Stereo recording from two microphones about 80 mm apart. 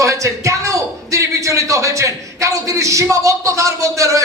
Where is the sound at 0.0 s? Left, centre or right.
Right.